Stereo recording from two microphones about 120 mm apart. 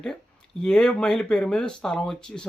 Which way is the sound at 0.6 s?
5° left (ahead or behind).